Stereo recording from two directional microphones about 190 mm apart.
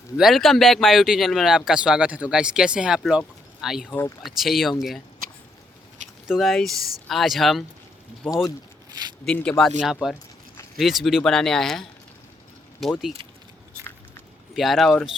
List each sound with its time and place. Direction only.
0.2 s speech: centre (ahead or behind)
3.8 s speech: 10° left (ahead or behind)
4.2 s speech: centre (ahead or behind)
6.2 s speech: centre (ahead or behind)
14.5 s speech: centre (ahead or behind)